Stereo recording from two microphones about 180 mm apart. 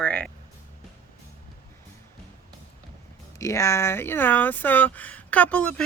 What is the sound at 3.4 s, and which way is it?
Speech, 15° left (ahead or behind).